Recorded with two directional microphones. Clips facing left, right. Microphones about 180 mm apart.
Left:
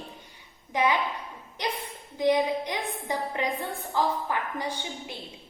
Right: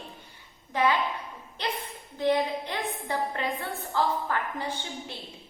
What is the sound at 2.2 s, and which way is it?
A woman's voice, 15° left (ahead or behind).